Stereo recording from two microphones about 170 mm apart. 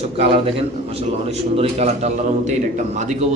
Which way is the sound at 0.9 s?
40° right (ahead or behind).